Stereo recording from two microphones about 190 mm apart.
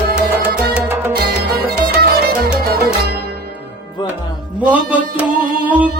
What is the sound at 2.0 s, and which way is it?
Music, 55° right (ahead or behind).